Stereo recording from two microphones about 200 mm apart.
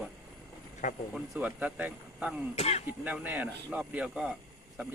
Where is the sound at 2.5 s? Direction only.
30° left (ahead or behind).